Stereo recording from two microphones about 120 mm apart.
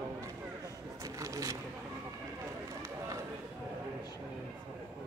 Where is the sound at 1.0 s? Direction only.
25° right (ahead or behind).